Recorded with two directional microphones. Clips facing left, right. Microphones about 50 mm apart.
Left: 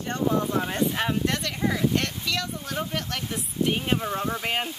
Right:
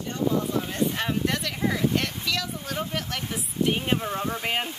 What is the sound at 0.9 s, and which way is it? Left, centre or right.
Speech, centre.